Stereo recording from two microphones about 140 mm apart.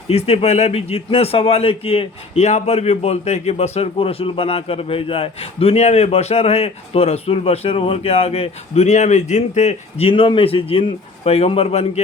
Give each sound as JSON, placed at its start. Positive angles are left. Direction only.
{"t": 0.1, "sound": "a man's voice", "side_deg": 45}